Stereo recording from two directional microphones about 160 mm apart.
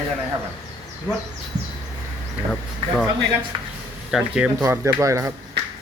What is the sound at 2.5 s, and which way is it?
Speech, 5° left (ahead or behind).